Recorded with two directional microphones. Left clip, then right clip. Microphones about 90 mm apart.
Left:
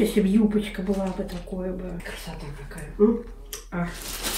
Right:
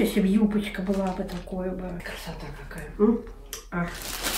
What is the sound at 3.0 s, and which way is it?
Speech, 15° right (ahead or behind).